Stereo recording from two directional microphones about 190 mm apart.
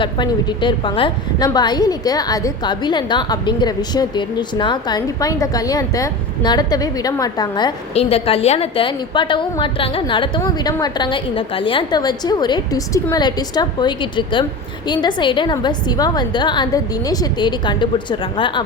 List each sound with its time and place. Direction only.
0.0 s a woman's voice: 25° left (ahead or behind)